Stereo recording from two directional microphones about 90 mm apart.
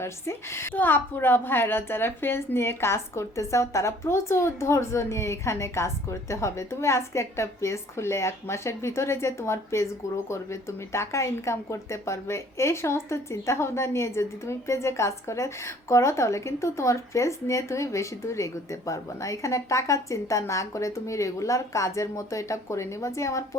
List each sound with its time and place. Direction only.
0.0 s a woman's voice: 30° left (ahead or behind)